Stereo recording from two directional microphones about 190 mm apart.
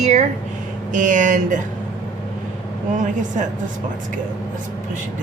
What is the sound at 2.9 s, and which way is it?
Speech, 40° right (ahead or behind).